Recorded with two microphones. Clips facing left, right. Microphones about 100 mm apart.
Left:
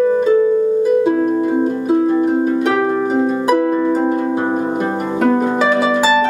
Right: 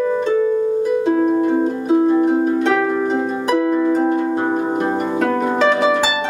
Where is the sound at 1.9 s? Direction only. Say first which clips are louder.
Right 1 dB; 5° right (ahead or behind).